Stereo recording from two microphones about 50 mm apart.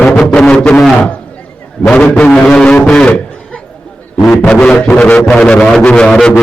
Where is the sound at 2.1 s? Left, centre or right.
Left.